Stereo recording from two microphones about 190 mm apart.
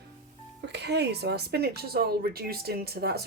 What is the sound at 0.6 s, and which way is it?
Speech, 65° right (ahead or behind).